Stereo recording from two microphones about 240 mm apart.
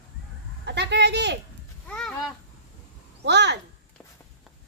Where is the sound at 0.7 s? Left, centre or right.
Right.